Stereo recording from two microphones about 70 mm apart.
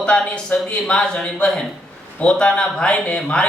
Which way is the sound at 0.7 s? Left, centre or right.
Centre.